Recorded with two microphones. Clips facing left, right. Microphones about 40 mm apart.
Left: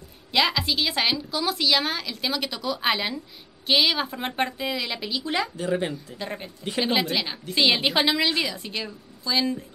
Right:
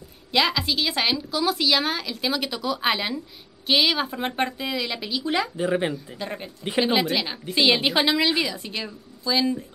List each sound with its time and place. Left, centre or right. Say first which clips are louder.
0.3 s a woman's voice: right 1 dB; centre
5.6 s speech: right 2 dB; centre
6.1 s a woman's voice: right 1 dB; centre